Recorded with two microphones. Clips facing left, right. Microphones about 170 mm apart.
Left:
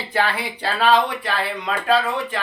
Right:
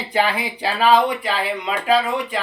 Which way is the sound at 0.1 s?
15° right (ahead or behind).